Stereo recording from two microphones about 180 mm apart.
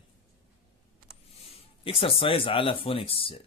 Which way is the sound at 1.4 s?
30° left (ahead or behind).